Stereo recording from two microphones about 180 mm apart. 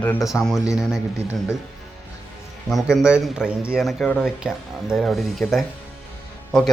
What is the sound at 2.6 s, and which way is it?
Speech, centre (ahead or behind).